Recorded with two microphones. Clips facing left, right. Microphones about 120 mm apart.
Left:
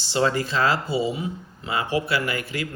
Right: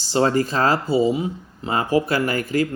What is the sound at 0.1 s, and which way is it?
Speech, 40° right (ahead or behind).